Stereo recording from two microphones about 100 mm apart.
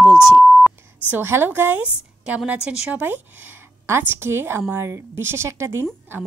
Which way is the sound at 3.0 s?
20° right (ahead or behind).